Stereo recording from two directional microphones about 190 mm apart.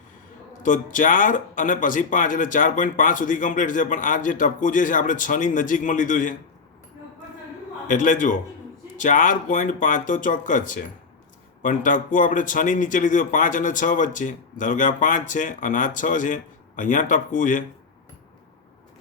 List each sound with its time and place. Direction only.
0.6 s a man's voice: 45° left (ahead or behind)
7.9 s a man's voice: 40° left (ahead or behind)